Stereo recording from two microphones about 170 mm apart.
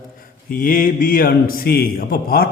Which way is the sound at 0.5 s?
55° left (ahead or behind).